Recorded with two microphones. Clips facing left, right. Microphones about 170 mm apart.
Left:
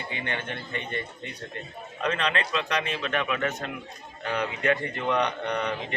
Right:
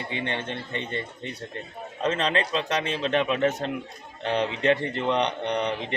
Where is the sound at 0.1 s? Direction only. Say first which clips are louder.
Right 3 dB; 30° right (ahead or behind).